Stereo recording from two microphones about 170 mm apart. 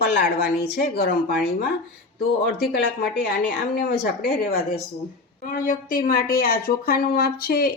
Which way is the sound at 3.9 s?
75° left (ahead or behind).